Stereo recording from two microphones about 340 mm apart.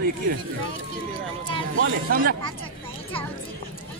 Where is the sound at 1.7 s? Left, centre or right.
Right.